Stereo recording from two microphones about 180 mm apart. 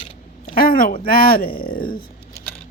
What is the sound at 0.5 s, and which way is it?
Speech, 55° left (ahead or behind).